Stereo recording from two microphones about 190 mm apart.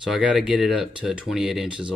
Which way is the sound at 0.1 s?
Centre (ahead or behind).